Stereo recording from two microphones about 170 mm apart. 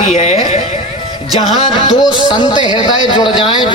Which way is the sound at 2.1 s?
25° left (ahead or behind).